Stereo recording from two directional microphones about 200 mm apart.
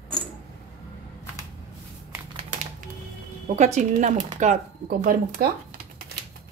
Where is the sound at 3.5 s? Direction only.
35° right (ahead or behind).